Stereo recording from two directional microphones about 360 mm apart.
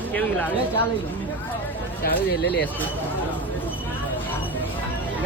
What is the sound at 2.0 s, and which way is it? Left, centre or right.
Speech, left.